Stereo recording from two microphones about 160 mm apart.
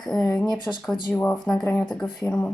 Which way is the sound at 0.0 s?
5° left (ahead or behind).